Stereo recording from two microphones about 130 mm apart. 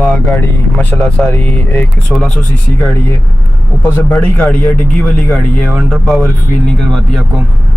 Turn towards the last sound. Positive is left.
turn(degrees=5)  # may be behind; listen again after turning